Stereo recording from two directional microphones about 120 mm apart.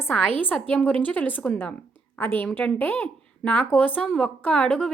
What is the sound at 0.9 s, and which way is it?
A woman's voice, 10° left (ahead or behind).